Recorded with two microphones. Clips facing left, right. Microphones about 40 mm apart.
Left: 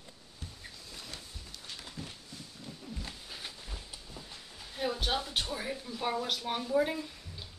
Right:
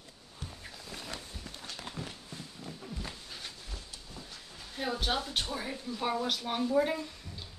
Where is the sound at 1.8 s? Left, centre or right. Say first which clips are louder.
Right 5 dB; right.